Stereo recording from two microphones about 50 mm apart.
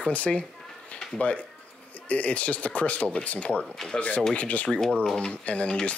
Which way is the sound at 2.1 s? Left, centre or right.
Left.